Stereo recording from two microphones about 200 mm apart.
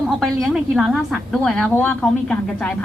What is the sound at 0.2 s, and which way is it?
A woman's voice, centre (ahead or behind).